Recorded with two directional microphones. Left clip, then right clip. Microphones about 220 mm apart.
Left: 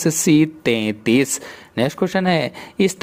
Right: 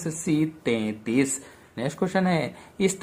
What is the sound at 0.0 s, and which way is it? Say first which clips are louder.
Speech: left 10 dB; 35° left (ahead or behind).